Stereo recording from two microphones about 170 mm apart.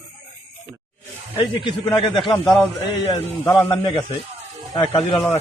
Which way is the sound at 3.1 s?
20° left (ahead or behind).